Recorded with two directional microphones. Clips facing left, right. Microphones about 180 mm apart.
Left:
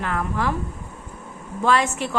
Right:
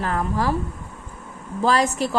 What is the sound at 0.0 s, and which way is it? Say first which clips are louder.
Speech: right 2 dB; 35° right (ahead or behind).